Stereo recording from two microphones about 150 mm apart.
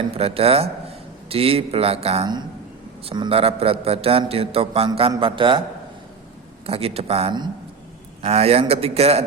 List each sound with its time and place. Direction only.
0.2 s a man's voice: 40° right (ahead or behind)
2.2 s a man's voice: 30° right (ahead or behind)
6.7 s a man's voice: 40° right (ahead or behind)